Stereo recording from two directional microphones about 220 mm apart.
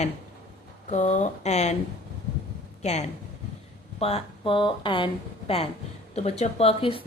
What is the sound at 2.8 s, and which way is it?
Speech, 30° left (ahead or behind).